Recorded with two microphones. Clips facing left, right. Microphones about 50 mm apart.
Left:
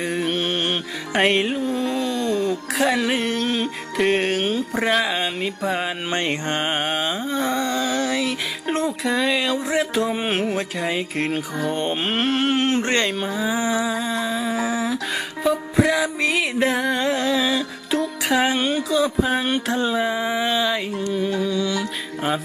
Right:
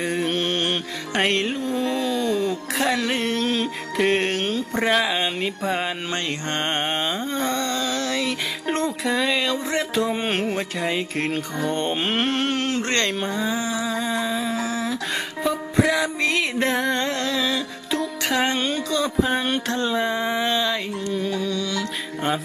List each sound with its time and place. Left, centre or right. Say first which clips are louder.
0.0 s music: even; centre
6.1 s a sound: left 3 dB; left
6.5 s music: right 2 dB; centre
13.6 s a sound: left 4 dB; left
13.9 s humming: even; centre
15.4 s music: left 2 dB; centre